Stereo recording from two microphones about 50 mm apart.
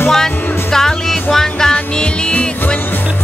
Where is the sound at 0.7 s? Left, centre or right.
Centre.